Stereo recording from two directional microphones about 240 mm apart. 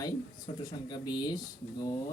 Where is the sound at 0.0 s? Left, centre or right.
Centre.